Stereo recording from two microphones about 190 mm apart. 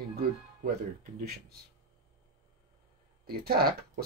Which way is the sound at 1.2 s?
55° right (ahead or behind).